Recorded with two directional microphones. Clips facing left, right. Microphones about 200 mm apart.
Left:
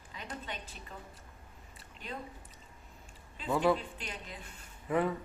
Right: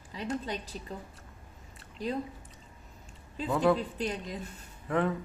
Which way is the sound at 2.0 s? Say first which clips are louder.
Right 11 dB; 35° right (ahead or behind).